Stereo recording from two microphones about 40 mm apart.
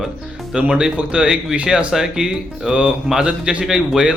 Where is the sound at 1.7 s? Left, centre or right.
Centre.